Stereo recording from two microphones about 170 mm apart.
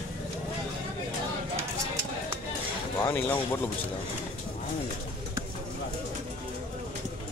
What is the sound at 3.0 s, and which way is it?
Speech, 15° left (ahead or behind).